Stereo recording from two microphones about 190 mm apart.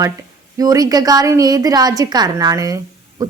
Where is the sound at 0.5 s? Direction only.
20° right (ahead or behind).